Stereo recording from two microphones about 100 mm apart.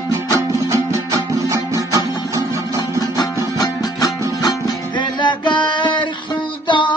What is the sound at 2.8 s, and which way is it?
Music, 40° left (ahead or behind).